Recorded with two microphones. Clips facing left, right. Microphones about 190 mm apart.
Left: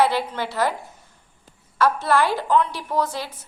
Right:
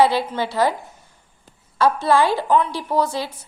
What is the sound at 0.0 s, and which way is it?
Speech, 10° right (ahead or behind).